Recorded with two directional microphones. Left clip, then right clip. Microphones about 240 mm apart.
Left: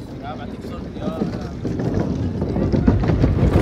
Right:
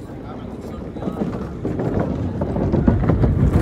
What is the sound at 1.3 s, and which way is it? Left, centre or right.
Boat, right.